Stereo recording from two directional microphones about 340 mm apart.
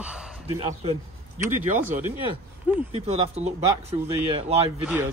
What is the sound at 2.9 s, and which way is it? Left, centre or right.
Speech, centre.